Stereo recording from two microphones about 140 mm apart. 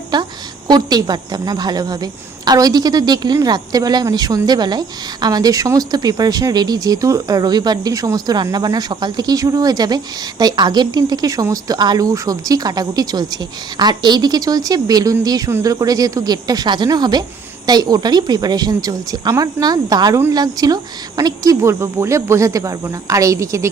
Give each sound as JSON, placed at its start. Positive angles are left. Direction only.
{"t": 0.1, "sound": "a woman's voice", "side_deg": -30}